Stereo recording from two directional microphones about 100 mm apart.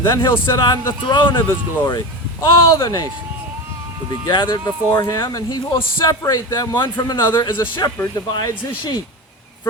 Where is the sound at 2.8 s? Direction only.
35° left (ahead or behind).